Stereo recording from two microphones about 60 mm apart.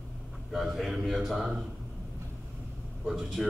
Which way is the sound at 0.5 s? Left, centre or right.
Centre.